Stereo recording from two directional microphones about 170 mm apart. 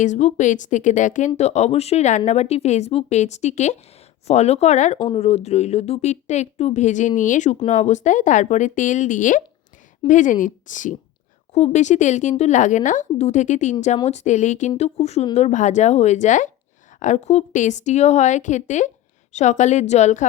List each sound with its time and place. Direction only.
0.0 s a woman's voice: 45° left (ahead or behind)
4.9 s a woman's voice: 30° left (ahead or behind)